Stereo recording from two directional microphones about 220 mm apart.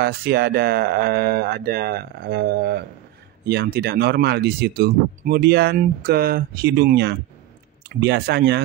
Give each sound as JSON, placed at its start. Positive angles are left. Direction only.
{"t": 0.0, "sound": "speech", "side_deg": -45}